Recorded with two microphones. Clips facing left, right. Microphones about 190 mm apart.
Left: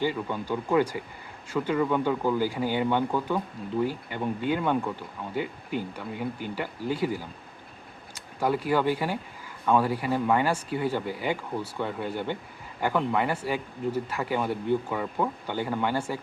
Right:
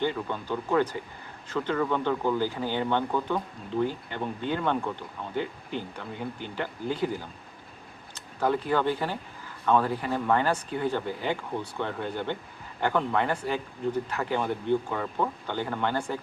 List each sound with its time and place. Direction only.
0.0 s speech: 10° left (ahead or behind)